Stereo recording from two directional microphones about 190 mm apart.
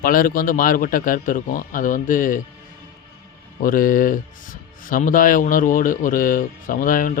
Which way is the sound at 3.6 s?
45° left (ahead or behind).